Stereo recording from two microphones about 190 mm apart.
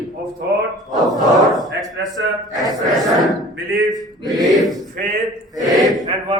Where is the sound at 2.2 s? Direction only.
70° right (ahead or behind).